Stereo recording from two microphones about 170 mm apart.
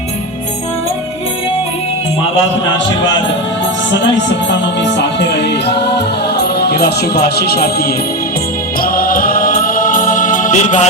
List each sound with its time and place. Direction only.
4.8 s music: 90° left
5.6 s music: 75° left (ahead or behind); by 10.8 s 45° left (ahead or behind)